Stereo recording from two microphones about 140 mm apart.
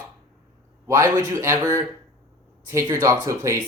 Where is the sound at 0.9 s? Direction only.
20° right (ahead or behind).